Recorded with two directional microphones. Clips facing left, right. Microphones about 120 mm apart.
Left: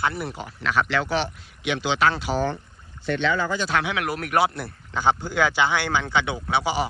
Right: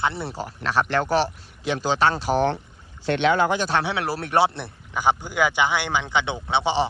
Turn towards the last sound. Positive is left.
turn(degrees=-25)  # may be behind; listen again after turning